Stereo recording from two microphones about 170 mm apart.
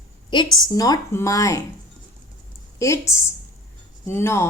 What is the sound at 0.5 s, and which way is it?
A woman's voice, 20° left (ahead or behind).